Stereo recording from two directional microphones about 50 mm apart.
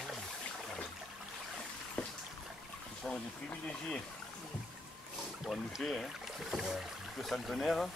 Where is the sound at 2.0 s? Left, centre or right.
Centre.